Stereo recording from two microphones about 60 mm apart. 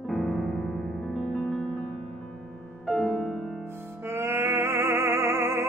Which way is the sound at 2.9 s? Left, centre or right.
Centre.